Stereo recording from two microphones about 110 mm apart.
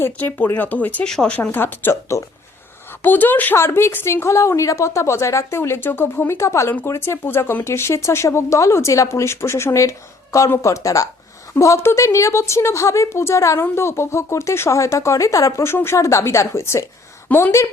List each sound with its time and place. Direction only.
0.0 s speech: 20° left (ahead or behind)
1.4 s a woman's voice: 20° left (ahead or behind)